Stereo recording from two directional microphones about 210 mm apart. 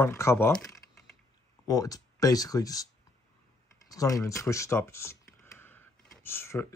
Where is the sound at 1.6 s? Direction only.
15° left (ahead or behind).